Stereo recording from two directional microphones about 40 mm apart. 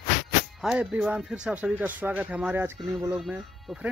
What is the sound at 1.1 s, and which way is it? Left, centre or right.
Speech, right.